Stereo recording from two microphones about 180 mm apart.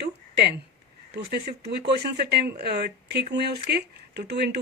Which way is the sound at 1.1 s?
65° right (ahead or behind).